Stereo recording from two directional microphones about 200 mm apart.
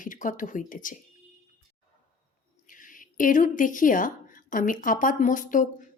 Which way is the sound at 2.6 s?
40° left (ahead or behind).